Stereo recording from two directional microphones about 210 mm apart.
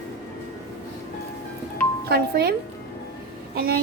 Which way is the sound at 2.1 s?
50° right (ahead or behind).